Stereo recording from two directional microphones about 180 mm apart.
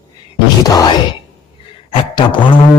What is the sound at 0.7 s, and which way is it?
Speech, 20° left (ahead or behind).